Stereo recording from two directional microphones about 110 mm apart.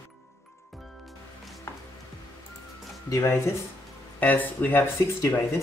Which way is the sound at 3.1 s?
25° left (ahead or behind).